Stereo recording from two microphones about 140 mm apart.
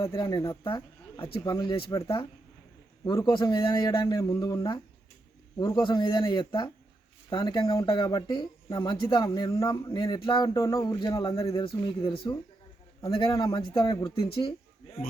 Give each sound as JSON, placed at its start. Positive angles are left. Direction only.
{"t": 0.2, "sound": "speech", "side_deg": 25}
{"t": 5.8, "sound": "speech", "side_deg": 35}
{"t": 9.2, "sound": "speech", "side_deg": 25}